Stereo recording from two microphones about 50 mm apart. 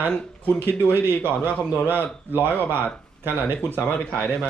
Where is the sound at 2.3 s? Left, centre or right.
Right.